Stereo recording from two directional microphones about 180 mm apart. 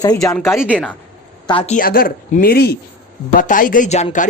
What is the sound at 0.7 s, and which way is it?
Speech, 5° left (ahead or behind).